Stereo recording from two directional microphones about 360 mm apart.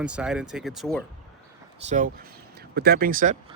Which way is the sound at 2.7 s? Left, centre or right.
Right.